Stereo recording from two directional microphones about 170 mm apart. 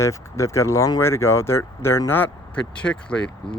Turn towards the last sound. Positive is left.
turn(degrees=5)  # may be behind; listen again after turning